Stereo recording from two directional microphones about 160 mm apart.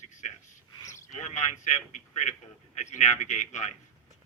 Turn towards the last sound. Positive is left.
turn(degrees=50)  # may be behind; listen again after turning